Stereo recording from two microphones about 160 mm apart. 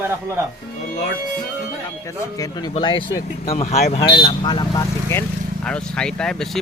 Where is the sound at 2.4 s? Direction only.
25° left (ahead or behind).